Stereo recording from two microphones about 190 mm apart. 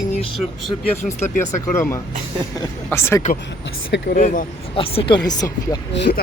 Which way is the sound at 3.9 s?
70° left (ahead or behind).